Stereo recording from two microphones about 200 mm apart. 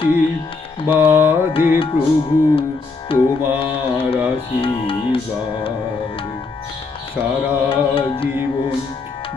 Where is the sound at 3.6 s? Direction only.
25° left (ahead or behind).